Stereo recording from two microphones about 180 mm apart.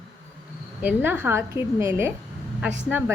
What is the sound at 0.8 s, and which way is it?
A woman's voice, 10° right (ahead or behind).